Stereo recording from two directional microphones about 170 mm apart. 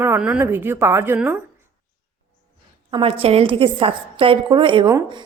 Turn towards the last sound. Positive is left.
turn(degrees=-25)  # may be behind; listen again after turning